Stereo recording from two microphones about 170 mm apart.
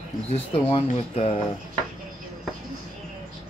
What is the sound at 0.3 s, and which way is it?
Speech, 35° left (ahead or behind).